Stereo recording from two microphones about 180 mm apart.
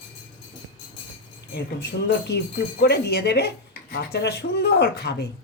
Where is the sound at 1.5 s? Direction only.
70° left (ahead or behind).